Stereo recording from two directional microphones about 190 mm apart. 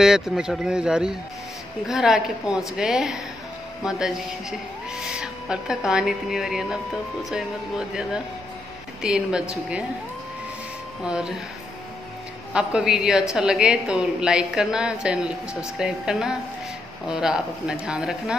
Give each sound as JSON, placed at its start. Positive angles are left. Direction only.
{"t": 0.0, "sound": "a woman's voice", "side_deg": -5}
{"t": 11.0, "sound": "a woman's voice", "side_deg": -5}
{"t": 12.5, "sound": "a woman's voice", "side_deg": -5}